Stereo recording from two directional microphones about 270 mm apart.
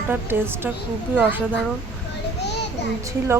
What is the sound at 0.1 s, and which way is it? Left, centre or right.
Speech, centre.